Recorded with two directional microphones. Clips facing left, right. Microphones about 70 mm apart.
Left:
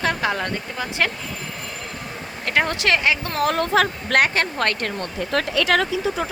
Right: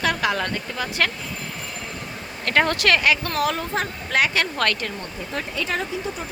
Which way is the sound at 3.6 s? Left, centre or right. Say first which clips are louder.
Left 7 dB; left.